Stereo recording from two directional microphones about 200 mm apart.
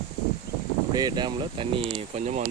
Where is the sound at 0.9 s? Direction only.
20° right (ahead or behind); by 2.5 s 35° right (ahead or behind).